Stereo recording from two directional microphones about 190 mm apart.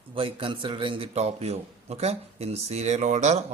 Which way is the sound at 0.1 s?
25° right (ahead or behind).